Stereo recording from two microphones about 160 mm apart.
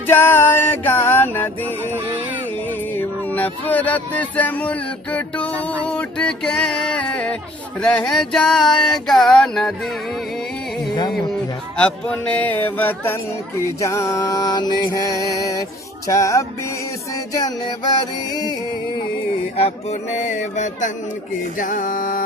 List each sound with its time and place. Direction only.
0.1 s music: 15° left (ahead or behind)
2.9 s speech: 10° left (ahead or behind)
7.8 s a sound: 5° left (ahead or behind)
11.8 s speech: 5° left (ahead or behind)
13.6 s music: 20° left (ahead or behind)
19.5 s speech: 40° left (ahead or behind)
21.6 s music: 55° left (ahead or behind)